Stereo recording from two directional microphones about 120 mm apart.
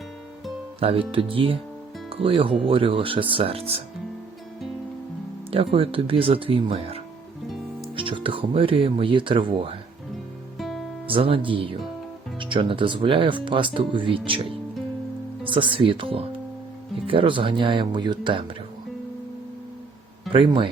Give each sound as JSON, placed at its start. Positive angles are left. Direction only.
{"t": 0.8, "sound": "speech", "side_deg": -50}
{"t": 5.5, "sound": "speech", "side_deg": -50}
{"t": 10.6, "sound": "music", "side_deg": 0}
{"t": 11.0, "sound": "speech", "side_deg": -50}
{"t": 20.3, "sound": "speech", "side_deg": -45}